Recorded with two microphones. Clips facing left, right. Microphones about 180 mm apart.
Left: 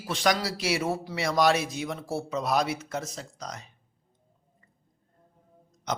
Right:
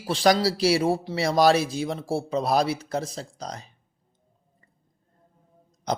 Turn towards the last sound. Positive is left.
turn(degrees=-35)  # may be behind; listen again after turning